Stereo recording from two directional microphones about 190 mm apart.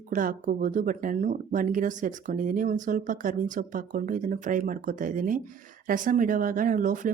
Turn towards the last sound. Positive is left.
turn(degrees=-40)  # may be behind; listen again after turning